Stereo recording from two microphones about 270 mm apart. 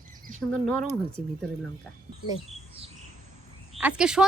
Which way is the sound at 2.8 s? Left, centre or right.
Right.